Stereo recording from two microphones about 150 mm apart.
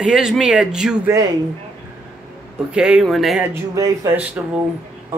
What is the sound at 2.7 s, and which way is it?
Speech, 5° right (ahead or behind).